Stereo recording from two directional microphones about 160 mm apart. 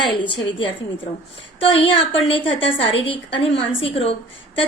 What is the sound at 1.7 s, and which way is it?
A woman's voice, 35° left (ahead or behind).